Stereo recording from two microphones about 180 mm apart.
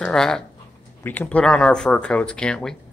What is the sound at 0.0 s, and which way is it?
Speech, 5° left (ahead or behind).